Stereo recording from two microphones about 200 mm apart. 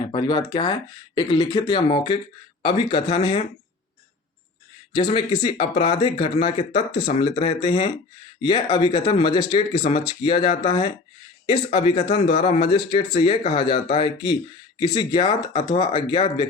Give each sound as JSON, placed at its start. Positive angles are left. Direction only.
{"t": 0.0, "sound": "speech", "side_deg": 25}
{"t": 4.9, "sound": "speech", "side_deg": 25}
{"t": 16.1, "sound": "speech", "side_deg": 35}